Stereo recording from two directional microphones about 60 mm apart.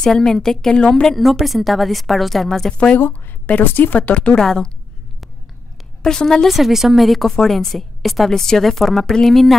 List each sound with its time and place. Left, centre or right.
0.0 s a woman's voice: centre
3.1 s speech: left
6.0 s a woman's voice: centre
6.5 s a woman's voice: centre